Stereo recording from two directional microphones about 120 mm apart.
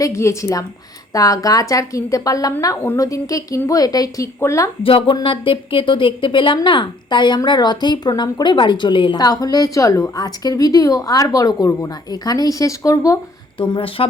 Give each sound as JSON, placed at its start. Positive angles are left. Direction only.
{"t": 0.0, "sound": "a woman's voice", "side_deg": 25}
{"t": 4.8, "sound": "a woman's voice", "side_deg": 50}
{"t": 13.6, "sound": "speech", "side_deg": 45}